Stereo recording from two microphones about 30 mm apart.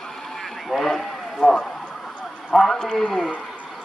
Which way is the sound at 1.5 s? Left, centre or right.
Centre.